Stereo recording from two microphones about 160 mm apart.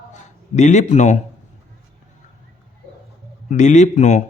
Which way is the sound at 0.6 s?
45° left (ahead or behind).